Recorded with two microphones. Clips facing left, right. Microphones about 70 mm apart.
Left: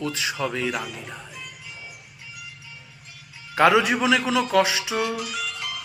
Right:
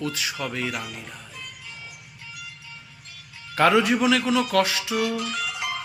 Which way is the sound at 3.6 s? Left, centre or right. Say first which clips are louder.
Left 1 dB; centre.